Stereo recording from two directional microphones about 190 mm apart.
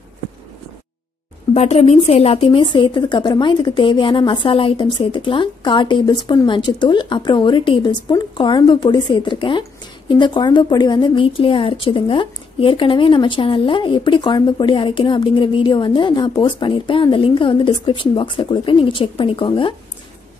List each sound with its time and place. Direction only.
1.5 s a woman's voice: 35° left (ahead or behind)